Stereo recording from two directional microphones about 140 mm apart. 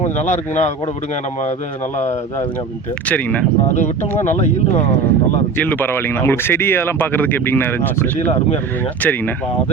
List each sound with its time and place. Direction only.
0.0 s speech: 55° left (ahead or behind)
3.1 s speech: 10° left (ahead or behind)
4.2 s speech: 60° left (ahead or behind)
5.5 s speech: 10° left (ahead or behind)
8.2 s speech: 50° left (ahead or behind)
9.0 s speech: 10° left (ahead or behind)